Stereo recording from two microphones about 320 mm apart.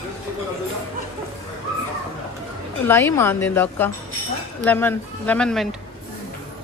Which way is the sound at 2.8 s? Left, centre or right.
Centre.